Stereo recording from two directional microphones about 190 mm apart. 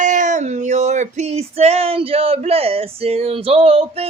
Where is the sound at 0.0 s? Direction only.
40° right (ahead or behind).